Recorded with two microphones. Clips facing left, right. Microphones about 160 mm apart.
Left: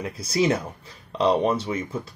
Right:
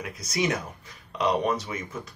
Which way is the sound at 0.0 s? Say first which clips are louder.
Left 5 dB; 30° left (ahead or behind).